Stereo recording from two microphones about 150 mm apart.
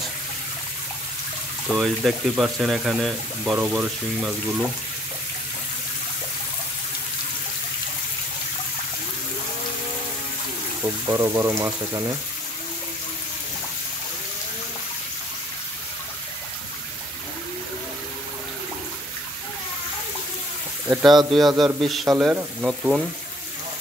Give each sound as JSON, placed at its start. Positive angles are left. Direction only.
{"t": 1.7, "sound": "speech", "side_deg": 0}
{"t": 11.1, "sound": "speech", "side_deg": -20}
{"t": 21.3, "sound": "speech", "side_deg": 0}